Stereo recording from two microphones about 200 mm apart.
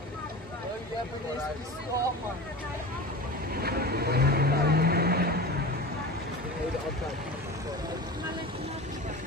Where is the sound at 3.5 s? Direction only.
50° right (ahead or behind).